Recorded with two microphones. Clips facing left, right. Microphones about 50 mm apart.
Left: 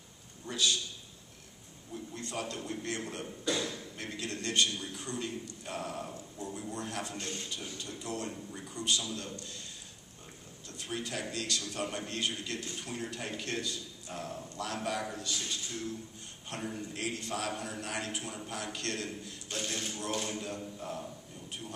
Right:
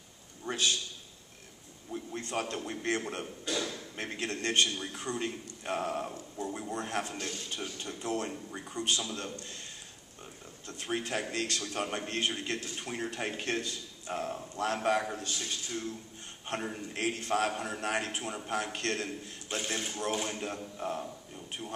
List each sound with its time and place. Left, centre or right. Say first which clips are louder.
0.5 s a sound: right 1 dB; right
1.9 s a man's voice: right 4 dB; right
10.7 s a man's voice: right 4 dB; right
16.4 s a man's voice: right 3 dB; right
19.5 s speech: right 2 dB; right
20.2 s a man's voice: right 1 dB; right